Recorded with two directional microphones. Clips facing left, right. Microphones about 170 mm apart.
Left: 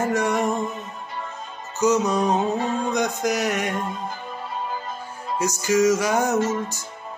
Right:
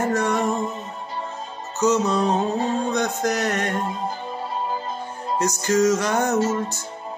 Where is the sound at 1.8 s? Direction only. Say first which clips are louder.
Even; 10° left (ahead or behind).